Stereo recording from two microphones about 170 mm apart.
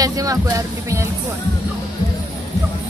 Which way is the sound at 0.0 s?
20° right (ahead or behind).